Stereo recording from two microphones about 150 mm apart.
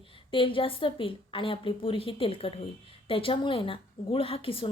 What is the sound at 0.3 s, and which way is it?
A woman's voice, 35° left (ahead or behind).